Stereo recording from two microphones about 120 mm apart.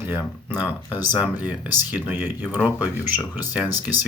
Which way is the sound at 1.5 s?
15° right (ahead or behind).